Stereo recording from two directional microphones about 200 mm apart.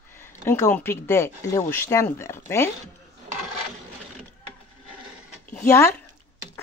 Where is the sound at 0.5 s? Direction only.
10° left (ahead or behind).